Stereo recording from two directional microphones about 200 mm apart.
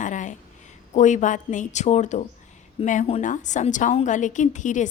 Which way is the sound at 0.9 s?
35° left (ahead or behind).